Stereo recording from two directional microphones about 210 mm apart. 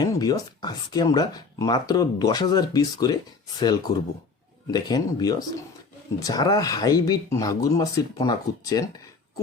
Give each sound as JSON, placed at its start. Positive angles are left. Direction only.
{"t": 0.0, "sound": "speech", "side_deg": 20}